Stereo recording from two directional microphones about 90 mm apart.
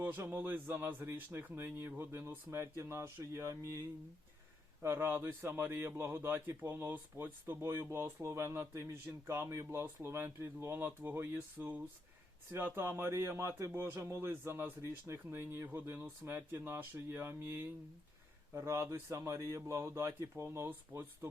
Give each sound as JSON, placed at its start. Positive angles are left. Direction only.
{"t": 0.0, "sound": "speech", "side_deg": -20}